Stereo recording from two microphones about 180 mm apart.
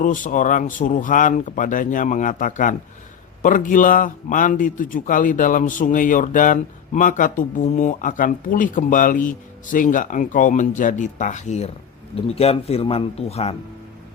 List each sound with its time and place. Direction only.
0.0 s a man's voice: 45° left (ahead or behind)